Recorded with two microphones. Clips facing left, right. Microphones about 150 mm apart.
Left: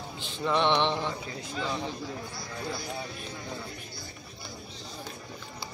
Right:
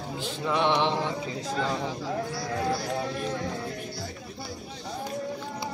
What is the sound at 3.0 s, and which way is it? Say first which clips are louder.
Speech: right 10 dB; 90° right.